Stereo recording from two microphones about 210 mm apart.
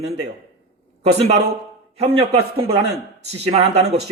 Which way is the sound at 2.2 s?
30° right (ahead or behind).